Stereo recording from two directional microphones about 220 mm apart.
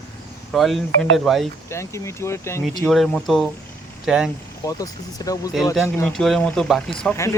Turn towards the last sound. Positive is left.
turn(degrees=0)  # may be behind; listen again after turning